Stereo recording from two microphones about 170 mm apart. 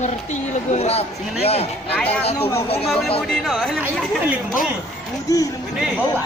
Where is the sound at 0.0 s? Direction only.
45° left (ahead or behind).